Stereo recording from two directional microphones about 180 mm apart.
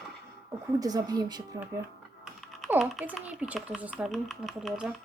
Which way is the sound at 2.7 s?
5° right (ahead or behind).